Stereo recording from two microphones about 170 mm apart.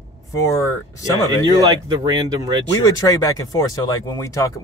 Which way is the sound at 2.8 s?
20° left (ahead or behind).